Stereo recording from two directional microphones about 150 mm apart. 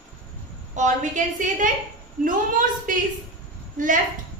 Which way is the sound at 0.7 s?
55° right (ahead or behind).